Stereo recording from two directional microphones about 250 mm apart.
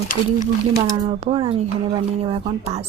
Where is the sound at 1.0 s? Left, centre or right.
Right.